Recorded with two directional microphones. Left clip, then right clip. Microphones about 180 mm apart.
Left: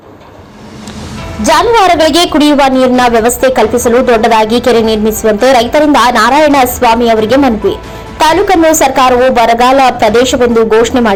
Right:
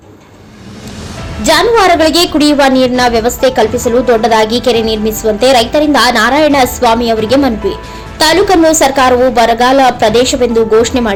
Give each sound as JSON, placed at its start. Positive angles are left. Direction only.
{"t": 1.5, "sound": "a woman's voice", "side_deg": 5}